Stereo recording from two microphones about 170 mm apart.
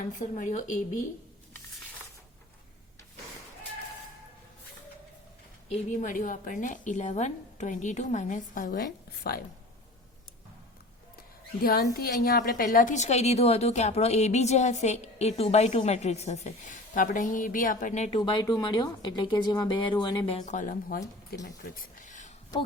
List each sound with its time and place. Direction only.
0.1 s a woman's voice: 50° left (ahead or behind)
5.7 s a woman's voice: 50° left (ahead or behind)
11.6 s a woman's voice: 60° left (ahead or behind); by 18.2 s 40° left (ahead or behind)
18.2 s speech: 25° left (ahead or behind)
20.4 s a woman's voice: 45° left (ahead or behind)